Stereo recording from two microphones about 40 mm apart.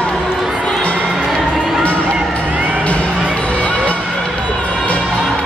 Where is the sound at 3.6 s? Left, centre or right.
Left.